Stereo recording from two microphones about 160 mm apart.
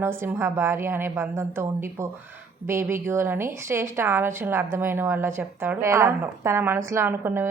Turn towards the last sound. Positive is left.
turn(degrees=-15)  # may be behind; listen again after turning